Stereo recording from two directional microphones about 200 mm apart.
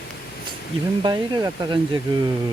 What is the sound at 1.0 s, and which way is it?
Speech, 20° right (ahead or behind).